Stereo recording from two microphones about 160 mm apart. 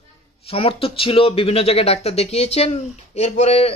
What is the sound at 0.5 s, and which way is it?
Speech, 35° left (ahead or behind).